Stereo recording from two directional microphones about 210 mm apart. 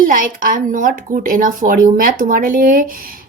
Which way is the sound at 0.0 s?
40° right (ahead or behind).